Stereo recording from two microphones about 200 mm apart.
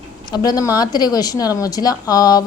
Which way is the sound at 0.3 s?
20° left (ahead or behind).